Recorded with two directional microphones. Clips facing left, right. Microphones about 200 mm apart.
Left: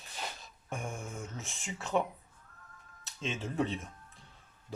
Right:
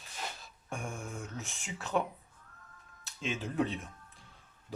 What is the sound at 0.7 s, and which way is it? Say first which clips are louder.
Speech: even; centre (ahead or behind).